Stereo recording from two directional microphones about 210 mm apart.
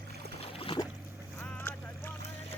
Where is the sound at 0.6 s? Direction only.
25° left (ahead or behind).